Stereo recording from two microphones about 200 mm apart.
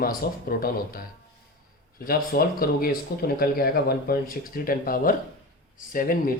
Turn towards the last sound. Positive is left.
turn(degrees=45)  # may be behind; listen again after turning